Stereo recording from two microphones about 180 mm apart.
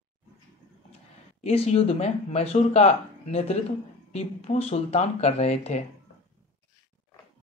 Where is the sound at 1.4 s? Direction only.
35° left (ahead or behind).